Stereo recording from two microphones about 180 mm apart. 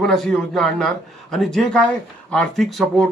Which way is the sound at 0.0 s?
Centre (ahead or behind).